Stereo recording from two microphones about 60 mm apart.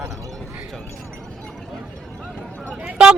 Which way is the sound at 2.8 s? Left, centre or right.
Centre.